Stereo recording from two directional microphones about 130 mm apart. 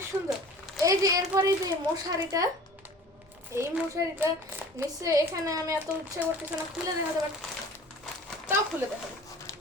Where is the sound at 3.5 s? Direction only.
20° right (ahead or behind).